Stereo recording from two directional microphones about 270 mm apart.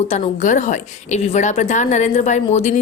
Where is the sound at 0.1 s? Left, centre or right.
Left.